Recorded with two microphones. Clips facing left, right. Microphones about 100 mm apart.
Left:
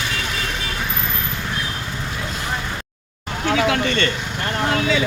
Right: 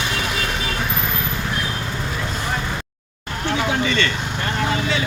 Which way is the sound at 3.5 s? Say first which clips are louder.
Left 2 dB; 75° left (ahead or behind).